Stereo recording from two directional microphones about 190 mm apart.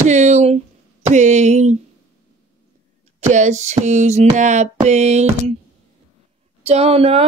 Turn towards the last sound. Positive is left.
turn(degrees=-30)  # may be behind; listen again after turning